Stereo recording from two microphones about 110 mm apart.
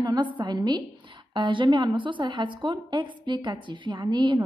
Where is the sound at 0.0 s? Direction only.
40° right (ahead or behind).